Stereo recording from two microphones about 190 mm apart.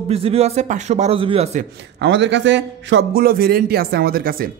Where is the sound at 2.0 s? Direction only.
70° right (ahead or behind).